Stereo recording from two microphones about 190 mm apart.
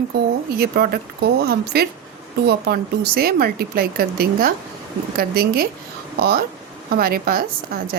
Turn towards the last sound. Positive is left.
turn(degrees=-50)  # may be behind; listen again after turning